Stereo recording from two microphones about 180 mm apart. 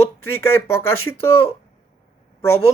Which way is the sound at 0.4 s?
15° left (ahead or behind).